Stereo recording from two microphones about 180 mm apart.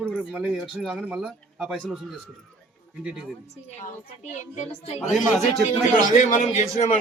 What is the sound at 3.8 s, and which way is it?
A woman's voice, 40° left (ahead or behind).